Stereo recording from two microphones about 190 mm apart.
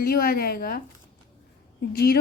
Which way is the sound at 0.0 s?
50° left (ahead or behind).